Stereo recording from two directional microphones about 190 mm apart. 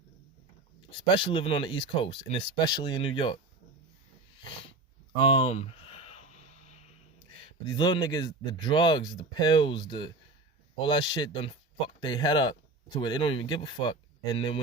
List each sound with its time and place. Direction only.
0.8 s speech: 25° left (ahead or behind)
5.2 s a sound: 30° left (ahead or behind)
7.3 s speech: 25° left (ahead or behind)